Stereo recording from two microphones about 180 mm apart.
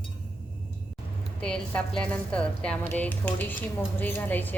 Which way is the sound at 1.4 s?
5° left (ahead or behind).